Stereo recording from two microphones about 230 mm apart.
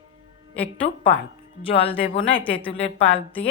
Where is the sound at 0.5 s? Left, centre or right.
Centre.